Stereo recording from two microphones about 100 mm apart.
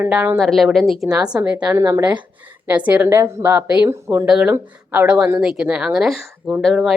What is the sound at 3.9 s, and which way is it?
Speech, 30° right (ahead or behind).